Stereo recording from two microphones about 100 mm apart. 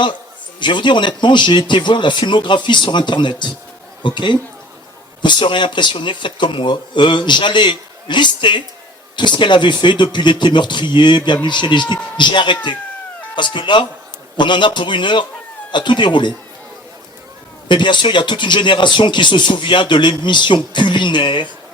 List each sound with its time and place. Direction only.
0.6 s speech: 50° left (ahead or behind)
17.7 s speech: 50° left (ahead or behind)